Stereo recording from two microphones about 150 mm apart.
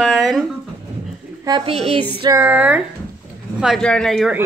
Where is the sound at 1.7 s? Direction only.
40° right (ahead or behind).